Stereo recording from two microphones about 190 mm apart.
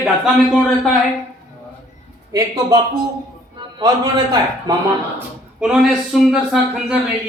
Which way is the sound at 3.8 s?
20° right (ahead or behind).